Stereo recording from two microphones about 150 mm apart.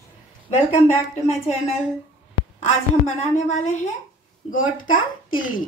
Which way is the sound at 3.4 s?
50° left (ahead or behind).